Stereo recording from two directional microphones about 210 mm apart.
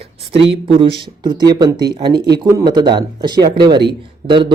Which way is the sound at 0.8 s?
20° right (ahead or behind).